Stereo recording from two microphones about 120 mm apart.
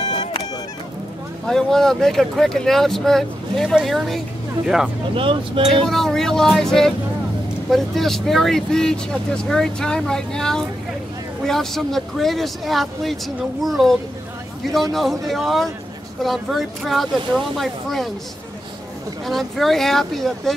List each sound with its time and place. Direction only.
1.5 s speech: 5° left (ahead or behind)
5.1 s speech: 45° right (ahead or behind)
5.9 s speech: 5° left (ahead or behind)
19.2 s speech: centre (ahead or behind)